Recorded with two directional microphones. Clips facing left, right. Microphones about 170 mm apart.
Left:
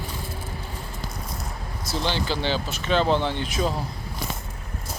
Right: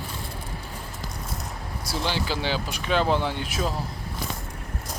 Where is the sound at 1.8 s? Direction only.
10° right (ahead or behind).